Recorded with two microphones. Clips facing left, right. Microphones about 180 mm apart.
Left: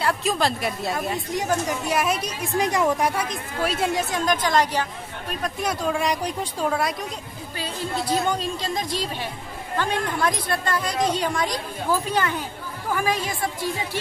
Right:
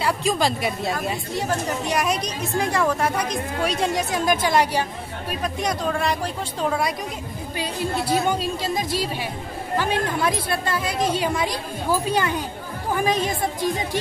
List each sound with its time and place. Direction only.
0.0 s speech: centre (ahead or behind)
2.5 s speech: 20° left (ahead or behind)
3.6 s a woman's voice: 5° left (ahead or behind)
5.4 s a woman's voice: 5° left (ahead or behind)
7.5 s a woman's voice: 10° right (ahead or behind)